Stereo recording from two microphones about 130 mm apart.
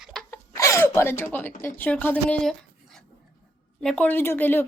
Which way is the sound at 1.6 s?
10° left (ahead or behind).